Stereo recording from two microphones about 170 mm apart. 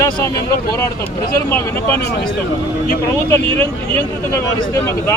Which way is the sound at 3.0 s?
15° left (ahead or behind).